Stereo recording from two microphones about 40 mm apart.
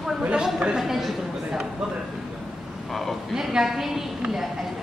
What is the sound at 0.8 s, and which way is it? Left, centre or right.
Speech, centre.